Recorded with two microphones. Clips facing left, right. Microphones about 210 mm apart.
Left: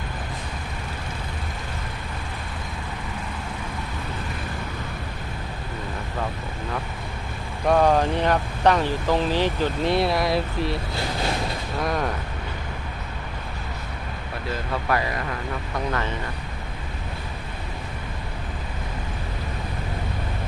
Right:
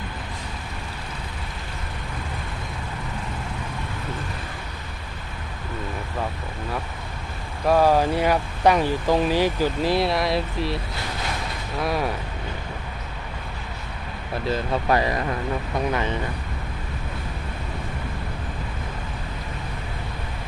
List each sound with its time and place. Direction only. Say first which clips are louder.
7.7 s speech: right 1 dB; 5° right (ahead or behind)
11.8 s speech: right 1 dB; 5° right (ahead or behind)
14.8 s speech: right 3 dB; 25° right (ahead or behind)